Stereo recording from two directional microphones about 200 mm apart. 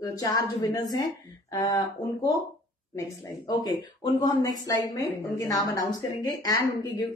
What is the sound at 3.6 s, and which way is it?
A woman's voice, 20° left (ahead or behind).